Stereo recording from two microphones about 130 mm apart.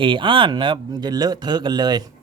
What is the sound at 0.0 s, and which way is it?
Speech, 40° right (ahead or behind).